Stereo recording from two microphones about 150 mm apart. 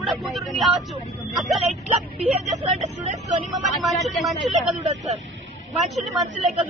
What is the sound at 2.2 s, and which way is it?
Speech, 45° right (ahead or behind).